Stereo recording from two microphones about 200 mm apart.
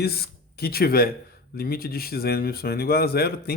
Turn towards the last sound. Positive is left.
turn(degrees=50)  # may be behind; listen again after turning